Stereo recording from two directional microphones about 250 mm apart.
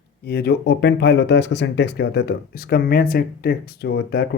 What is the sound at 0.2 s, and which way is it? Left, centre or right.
Speech, left.